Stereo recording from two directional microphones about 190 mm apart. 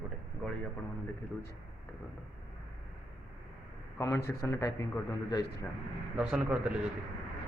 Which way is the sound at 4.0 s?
10° left (ahead or behind).